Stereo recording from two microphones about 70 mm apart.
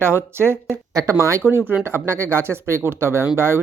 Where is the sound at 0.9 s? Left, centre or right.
Right.